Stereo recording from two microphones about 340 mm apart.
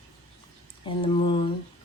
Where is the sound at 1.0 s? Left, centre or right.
Centre.